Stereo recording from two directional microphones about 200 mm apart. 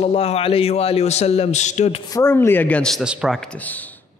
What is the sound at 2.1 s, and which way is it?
Speech, 15° left (ahead or behind).